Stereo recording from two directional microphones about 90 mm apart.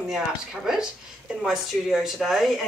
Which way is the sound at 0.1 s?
5° right (ahead or behind).